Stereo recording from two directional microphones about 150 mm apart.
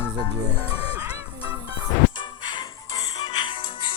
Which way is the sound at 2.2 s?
30° left (ahead or behind).